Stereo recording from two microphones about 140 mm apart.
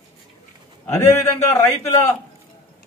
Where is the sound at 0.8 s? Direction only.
20° left (ahead or behind).